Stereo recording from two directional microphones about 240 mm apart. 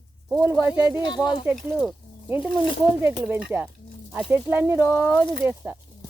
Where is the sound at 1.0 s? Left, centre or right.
Centre.